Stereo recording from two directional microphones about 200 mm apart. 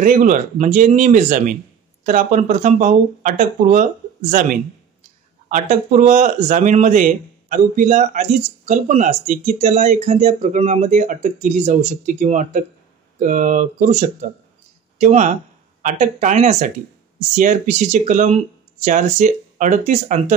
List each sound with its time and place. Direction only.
0.0 s speech: 40° right (ahead or behind)